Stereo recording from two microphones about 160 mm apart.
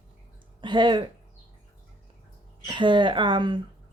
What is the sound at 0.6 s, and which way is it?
Speech, 30° right (ahead or behind).